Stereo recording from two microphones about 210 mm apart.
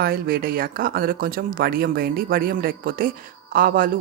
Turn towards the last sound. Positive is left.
turn(degrees=-45)  # may be behind; listen again after turning